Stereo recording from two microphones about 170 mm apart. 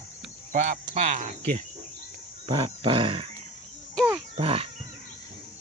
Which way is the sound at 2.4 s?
30° right (ahead or behind).